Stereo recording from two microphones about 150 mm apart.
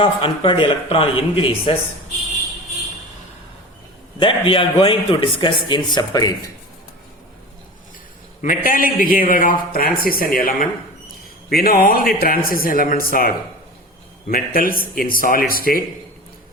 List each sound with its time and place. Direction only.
0.0 s a man's voice: 35° left (ahead or behind)
4.2 s a man's voice: 35° left (ahead or behind)
8.4 s a man's voice: 65° left (ahead or behind)
11.4 s a man's voice: 90° left; by 15.8 s 75° left (ahead or behind)